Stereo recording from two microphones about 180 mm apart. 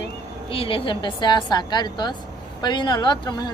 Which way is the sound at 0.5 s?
30° left (ahead or behind).